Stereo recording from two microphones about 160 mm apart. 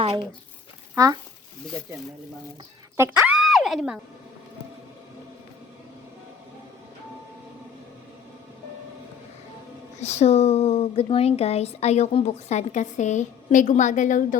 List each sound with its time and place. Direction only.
3.0 s speech: 10° right (ahead or behind)
10.0 s speech: 45° left (ahead or behind)